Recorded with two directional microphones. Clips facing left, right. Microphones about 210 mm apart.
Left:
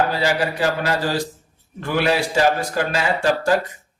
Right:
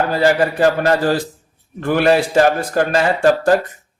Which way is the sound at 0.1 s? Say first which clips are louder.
Right 6 dB; 50° right (ahead or behind).